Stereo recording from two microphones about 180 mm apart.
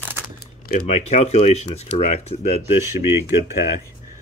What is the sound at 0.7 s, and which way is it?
Speech, 40° left (ahead or behind).